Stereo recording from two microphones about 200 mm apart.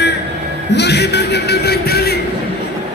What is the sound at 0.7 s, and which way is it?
Speech, 55° left (ahead or behind).